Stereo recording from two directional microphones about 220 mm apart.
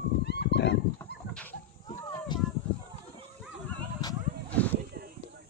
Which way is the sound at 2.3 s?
20° left (ahead or behind).